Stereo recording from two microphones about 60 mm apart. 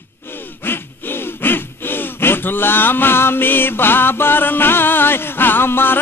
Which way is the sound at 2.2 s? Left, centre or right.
Left.